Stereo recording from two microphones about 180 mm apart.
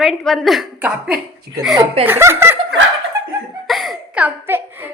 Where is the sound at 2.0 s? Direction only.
10° right (ahead or behind).